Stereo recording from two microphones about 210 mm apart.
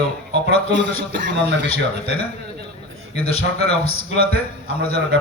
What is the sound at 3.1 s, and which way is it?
Speech, 30° left (ahead or behind).